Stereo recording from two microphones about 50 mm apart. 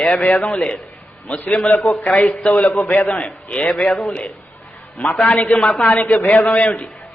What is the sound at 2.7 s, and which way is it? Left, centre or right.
Speech, left.